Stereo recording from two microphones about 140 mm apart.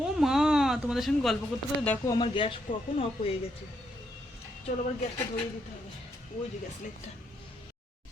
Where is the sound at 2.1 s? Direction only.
35° left (ahead or behind).